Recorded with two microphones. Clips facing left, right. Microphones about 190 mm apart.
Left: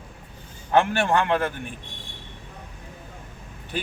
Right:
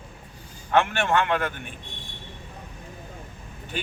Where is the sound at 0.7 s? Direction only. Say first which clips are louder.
Left 2 dB; 35° left (ahead or behind).